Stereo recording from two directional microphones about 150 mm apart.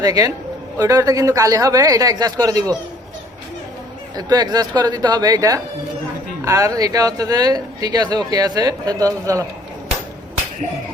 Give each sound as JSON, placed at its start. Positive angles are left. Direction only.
{"t": 0.0, "sound": "speech", "side_deg": -25}
{"t": 4.1, "sound": "speech", "side_deg": -25}